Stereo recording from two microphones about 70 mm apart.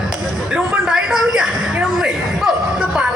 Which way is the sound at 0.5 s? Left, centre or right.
Centre.